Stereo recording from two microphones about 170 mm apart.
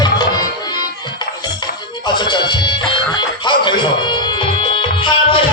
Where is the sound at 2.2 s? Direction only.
25° left (ahead or behind).